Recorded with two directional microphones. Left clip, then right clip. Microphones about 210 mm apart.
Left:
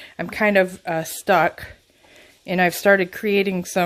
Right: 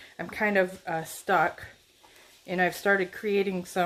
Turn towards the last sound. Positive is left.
turn(degrees=45)  # may be behind; listen again after turning